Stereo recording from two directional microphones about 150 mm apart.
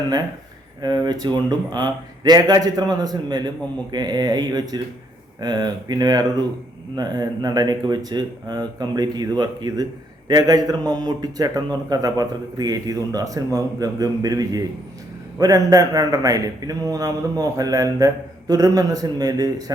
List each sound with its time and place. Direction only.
0.8 s a man's voice: 25° right (ahead or behind)